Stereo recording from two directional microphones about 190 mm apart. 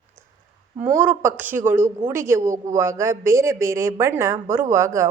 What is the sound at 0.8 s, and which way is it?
A man's voice, 10° right (ahead or behind).